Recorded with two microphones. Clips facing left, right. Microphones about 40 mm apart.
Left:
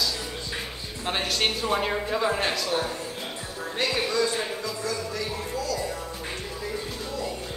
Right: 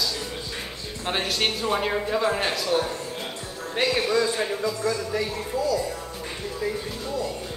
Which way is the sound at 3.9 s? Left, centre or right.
Centre.